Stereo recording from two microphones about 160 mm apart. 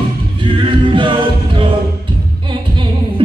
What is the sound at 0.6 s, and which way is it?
A capella, 30° right (ahead or behind).